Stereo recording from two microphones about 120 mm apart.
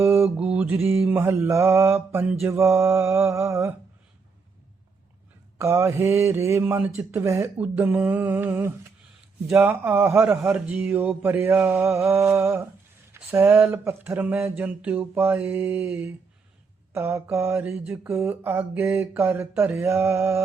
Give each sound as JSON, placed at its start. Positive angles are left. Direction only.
{"t": 0.0, "sound": "mantra", "side_deg": -20}
{"t": 5.5, "sound": "mantra", "side_deg": -20}
{"t": 9.5, "sound": "speech", "side_deg": -15}
{"t": 16.9, "sound": "mantra", "side_deg": -20}